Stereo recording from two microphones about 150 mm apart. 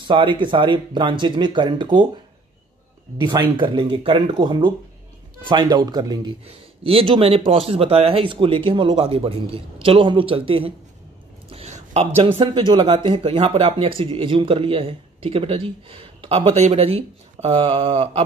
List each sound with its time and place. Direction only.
0.0 s speech: 35° right (ahead or behind)
3.2 s speech: 30° right (ahead or behind)
6.4 s speech: 40° right (ahead or behind)
11.5 s a sound: 45° right (ahead or behind)
12.2 s speech: 35° right (ahead or behind)